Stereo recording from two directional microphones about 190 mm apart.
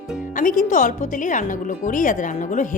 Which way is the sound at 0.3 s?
45° left (ahead or behind).